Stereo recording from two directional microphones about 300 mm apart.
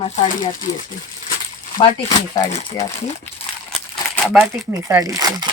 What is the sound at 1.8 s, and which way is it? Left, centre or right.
Speech, centre.